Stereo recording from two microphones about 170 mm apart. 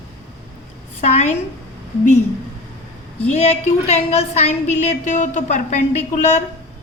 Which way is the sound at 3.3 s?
40° left (ahead or behind).